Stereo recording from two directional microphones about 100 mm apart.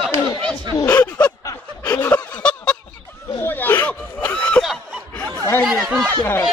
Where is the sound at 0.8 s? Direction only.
15° left (ahead or behind).